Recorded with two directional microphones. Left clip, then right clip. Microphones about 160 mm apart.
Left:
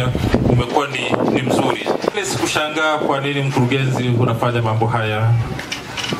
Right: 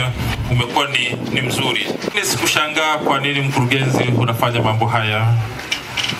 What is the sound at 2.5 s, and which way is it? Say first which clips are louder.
Speech: left 2 dB; 25° right (ahead or behind).